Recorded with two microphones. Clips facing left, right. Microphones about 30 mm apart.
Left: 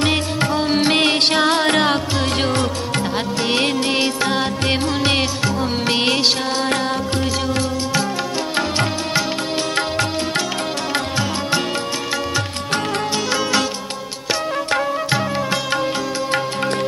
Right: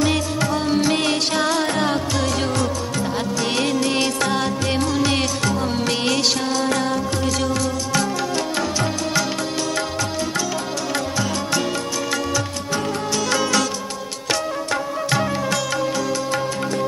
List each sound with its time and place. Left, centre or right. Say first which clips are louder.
0.1 s music: left 2 dB; left
1.7 s music: left 4 dB; left
4.6 s music: left 2 dB; left
5.4 s music: left 1 dB; centre; by 7.0 s left
8.5 s music: left 2 dB; left
9.8 s music: left 3 dB; left
10.9 s music: even; left
13.3 s music: even; left
15.0 s music: left 1 dB; left
15.7 s music: left 1 dB; left